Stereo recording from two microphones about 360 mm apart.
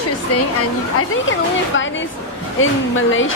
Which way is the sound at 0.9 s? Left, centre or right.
Left.